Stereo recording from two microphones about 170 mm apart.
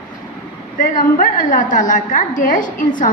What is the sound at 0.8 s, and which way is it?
A woman's voice, 55° left (ahead or behind).